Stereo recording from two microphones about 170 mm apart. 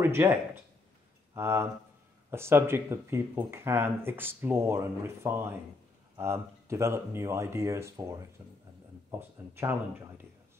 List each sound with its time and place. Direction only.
0.0 s speech: 15° right (ahead or behind)
9.5 s speech: 15° right (ahead or behind)